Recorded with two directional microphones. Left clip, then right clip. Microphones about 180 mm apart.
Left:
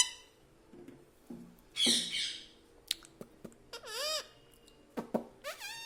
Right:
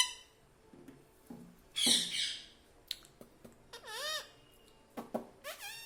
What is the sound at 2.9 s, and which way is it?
Chewing, 55° left (ahead or behind).